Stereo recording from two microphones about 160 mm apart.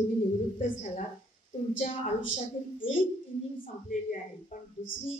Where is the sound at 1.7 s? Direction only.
50° left (ahead or behind).